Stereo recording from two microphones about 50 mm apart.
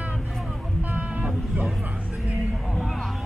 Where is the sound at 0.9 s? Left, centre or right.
Right.